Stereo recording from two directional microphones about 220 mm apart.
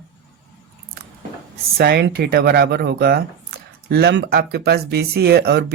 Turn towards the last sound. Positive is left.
turn(degrees=-45)  # may be behind; listen again after turning